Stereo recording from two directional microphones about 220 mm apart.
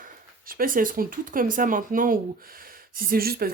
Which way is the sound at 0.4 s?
40° right (ahead or behind).